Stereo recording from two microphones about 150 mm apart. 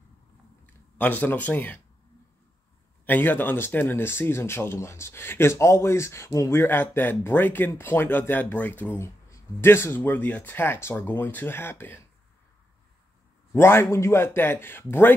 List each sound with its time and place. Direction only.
0.9 s speech: 10° left (ahead or behind)
3.1 s speech: 15° left (ahead or behind)
13.5 s speech: 15° left (ahead or behind)